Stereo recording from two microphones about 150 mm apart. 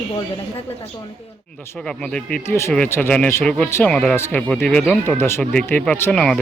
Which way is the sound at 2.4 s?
15° left (ahead or behind).